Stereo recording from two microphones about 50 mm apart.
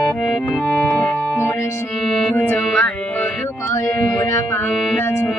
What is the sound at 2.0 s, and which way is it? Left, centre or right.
Music, centre.